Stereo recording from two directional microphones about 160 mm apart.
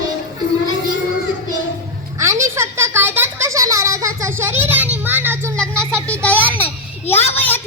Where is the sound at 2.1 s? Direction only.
20° right (ahead or behind).